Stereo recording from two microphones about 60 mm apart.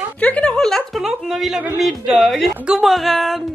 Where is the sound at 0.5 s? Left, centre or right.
Centre.